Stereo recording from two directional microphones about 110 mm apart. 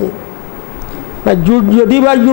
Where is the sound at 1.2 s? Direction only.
20° left (ahead or behind).